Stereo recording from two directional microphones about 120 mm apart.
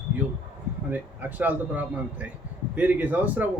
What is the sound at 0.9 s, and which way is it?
Speech, 15° right (ahead or behind).